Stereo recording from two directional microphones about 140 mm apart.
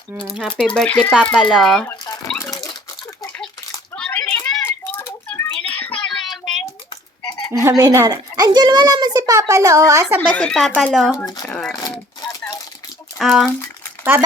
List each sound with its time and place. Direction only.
0.2 s speech: centre (ahead or behind)
3.9 s a sound: 10° left (ahead or behind)
7.3 s a sound: 30° left (ahead or behind)
7.5 s a child's voice: 25° right (ahead or behind)
10.2 s speech: 10° left (ahead or behind)
13.1 s speech: 5° right (ahead or behind)